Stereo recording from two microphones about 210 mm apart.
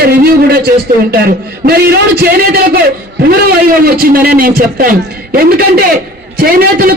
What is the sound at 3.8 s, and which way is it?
A man's voice, 45° right (ahead or behind).